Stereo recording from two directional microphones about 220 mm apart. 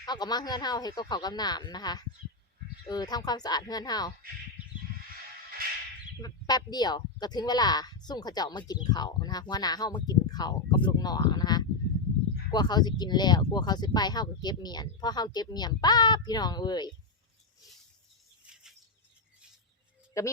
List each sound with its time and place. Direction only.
0.0 s speech: 20° left (ahead or behind)
6.2 s speech: 20° left (ahead or behind)
18.4 s a sound: centre (ahead or behind)
20.1 s speech: 15° left (ahead or behind)